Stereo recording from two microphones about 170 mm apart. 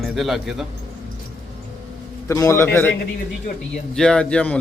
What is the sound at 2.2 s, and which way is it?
A man's voice, 20° left (ahead or behind).